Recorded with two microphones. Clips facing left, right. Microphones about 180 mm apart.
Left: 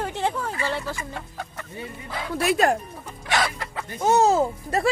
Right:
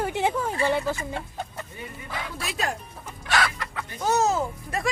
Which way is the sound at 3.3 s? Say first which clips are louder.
Left 1 dB; 25° left (ahead or behind).